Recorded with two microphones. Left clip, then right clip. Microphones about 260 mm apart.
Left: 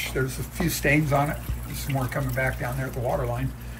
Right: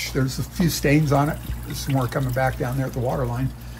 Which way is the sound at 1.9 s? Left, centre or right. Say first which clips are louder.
Right 4 dB; right.